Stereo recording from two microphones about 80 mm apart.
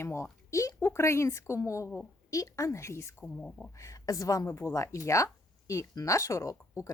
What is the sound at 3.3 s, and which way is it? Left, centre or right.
Speech, centre.